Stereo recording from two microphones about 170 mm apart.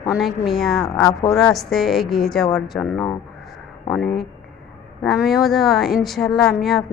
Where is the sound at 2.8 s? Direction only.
15° left (ahead or behind).